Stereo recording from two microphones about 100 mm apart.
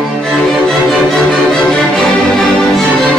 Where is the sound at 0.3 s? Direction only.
10° right (ahead or behind).